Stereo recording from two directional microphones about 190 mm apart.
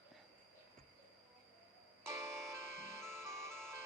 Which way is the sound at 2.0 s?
15° right (ahead or behind).